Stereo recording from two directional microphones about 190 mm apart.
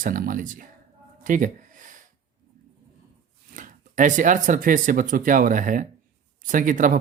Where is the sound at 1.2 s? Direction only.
45° right (ahead or behind).